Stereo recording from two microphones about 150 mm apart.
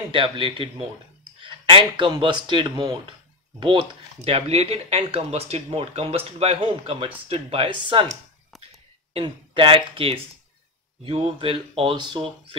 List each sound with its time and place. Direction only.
0.1 s speech: 35° right (ahead or behind)
9.1 s speech: 35° right (ahead or behind)